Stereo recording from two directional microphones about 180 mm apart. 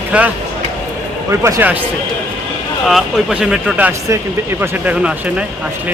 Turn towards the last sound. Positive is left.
turn(degrees=-10)  # may be behind; listen again after turning